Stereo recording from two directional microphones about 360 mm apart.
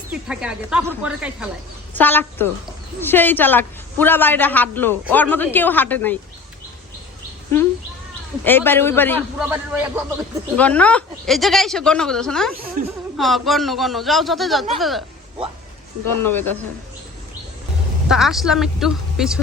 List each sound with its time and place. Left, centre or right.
0.1 s a man's voice: centre
8.4 s a man's voice: centre
9.5 s a man's voice: centre
16.0 s speech: left
16.3 s a man's voice: centre
18.1 s a man's voice: centre